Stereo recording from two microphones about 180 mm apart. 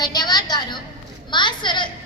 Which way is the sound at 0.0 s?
20° left (ahead or behind).